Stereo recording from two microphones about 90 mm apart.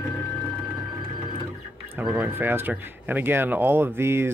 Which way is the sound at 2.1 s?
20° right (ahead or behind).